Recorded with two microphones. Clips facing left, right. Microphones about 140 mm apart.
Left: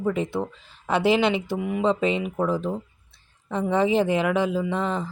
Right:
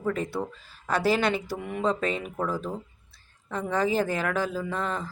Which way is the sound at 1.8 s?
20° left (ahead or behind).